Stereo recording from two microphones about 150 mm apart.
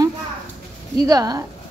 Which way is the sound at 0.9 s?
25° right (ahead or behind).